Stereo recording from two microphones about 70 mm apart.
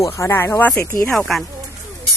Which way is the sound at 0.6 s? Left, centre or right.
Centre.